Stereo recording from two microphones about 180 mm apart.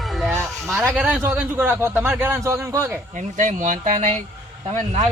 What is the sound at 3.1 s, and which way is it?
Speech, 45° right (ahead or behind).